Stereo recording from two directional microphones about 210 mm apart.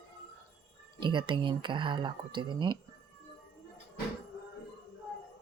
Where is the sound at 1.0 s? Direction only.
25° right (ahead or behind).